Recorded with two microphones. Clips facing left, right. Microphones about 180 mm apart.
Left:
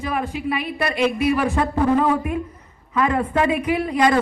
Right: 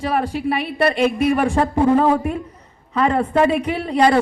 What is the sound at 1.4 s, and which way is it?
A woman's voice, 30° right (ahead or behind).